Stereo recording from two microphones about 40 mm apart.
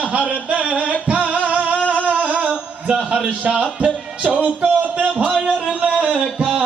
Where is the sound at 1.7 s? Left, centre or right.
Left.